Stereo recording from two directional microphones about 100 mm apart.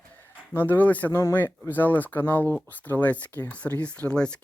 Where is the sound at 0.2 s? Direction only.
20° left (ahead or behind).